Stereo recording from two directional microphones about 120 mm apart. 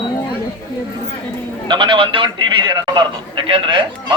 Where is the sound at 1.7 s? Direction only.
45° right (ahead or behind).